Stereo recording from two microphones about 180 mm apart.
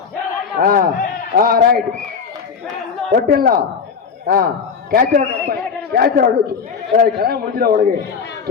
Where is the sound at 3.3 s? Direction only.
55° right (ahead or behind).